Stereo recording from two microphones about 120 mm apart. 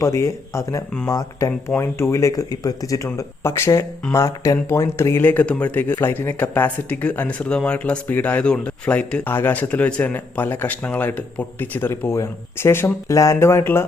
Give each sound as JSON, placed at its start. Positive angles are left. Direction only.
{"t": 0.0, "sound": "speech", "side_deg": 25}